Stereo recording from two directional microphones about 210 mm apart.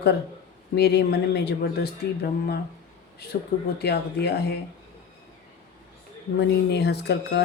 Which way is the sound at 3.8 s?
50° left (ahead or behind).